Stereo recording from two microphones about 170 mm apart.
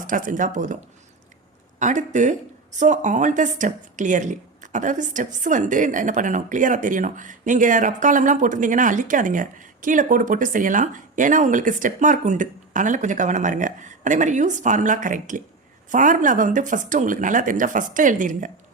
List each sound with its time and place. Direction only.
0.0 s speech: 50° right (ahead or behind)
1.8 s speech: 45° right (ahead or behind)